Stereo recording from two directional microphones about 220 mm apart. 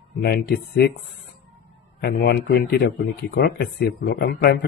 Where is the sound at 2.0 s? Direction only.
45° left (ahead or behind).